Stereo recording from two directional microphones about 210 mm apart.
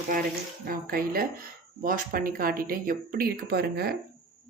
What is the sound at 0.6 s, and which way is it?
Speech, 45° right (ahead or behind).